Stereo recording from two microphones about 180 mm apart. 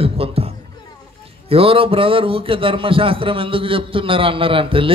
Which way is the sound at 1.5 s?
30° right (ahead or behind).